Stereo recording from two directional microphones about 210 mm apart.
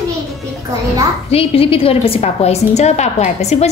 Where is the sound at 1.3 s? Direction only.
25° left (ahead or behind).